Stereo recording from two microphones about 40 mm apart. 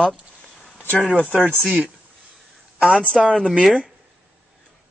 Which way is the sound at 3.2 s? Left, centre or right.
Centre.